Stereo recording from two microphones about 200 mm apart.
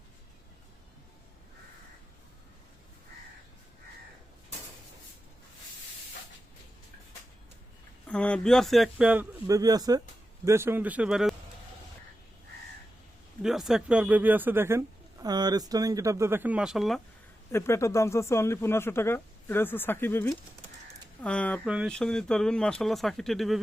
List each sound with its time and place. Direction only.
8.0 s speech: 5° left (ahead or behind)
13.4 s speech: centre (ahead or behind)
17.5 s speech: 15° left (ahead or behind)